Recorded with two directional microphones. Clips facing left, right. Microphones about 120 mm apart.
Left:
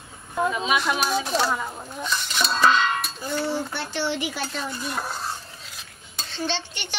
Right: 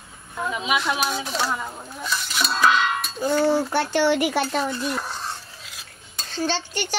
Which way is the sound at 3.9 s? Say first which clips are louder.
Right 8 dB; 65° right (ahead or behind).